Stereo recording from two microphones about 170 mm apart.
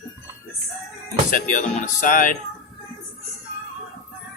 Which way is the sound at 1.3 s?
50° left (ahead or behind).